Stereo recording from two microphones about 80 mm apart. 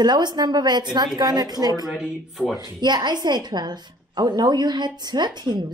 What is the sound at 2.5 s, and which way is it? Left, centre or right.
A woman's voice, right.